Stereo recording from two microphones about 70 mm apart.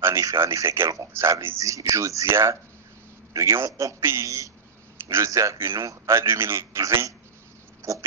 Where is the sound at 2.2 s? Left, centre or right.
Right.